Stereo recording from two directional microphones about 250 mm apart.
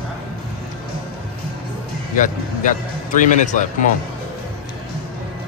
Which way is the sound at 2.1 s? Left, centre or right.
Left.